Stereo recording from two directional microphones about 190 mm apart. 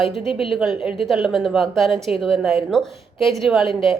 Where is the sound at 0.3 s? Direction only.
30° left (ahead or behind).